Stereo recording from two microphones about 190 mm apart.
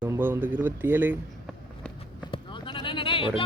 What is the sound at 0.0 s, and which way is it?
Speech, 10° right (ahead or behind).